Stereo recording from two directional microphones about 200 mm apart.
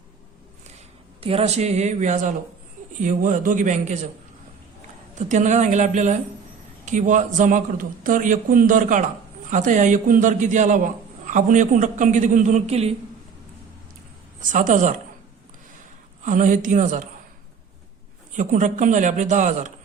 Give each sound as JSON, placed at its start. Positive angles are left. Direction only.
{"t": 1.2, "sound": "a man's voice", "side_deg": -30}
{"t": 5.1, "sound": "a man's voice", "side_deg": -35}
{"t": 14.5, "sound": "a man's voice", "side_deg": -40}
{"t": 16.2, "sound": "a man's voice", "side_deg": -40}
{"t": 18.3, "sound": "a man's voice", "side_deg": -40}